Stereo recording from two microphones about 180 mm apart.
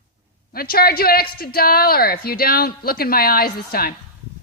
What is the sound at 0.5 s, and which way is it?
A woman's voice, 55° left (ahead or behind).